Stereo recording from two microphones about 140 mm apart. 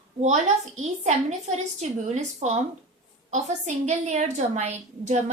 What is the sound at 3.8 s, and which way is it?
A woman's voice, 55° right (ahead or behind).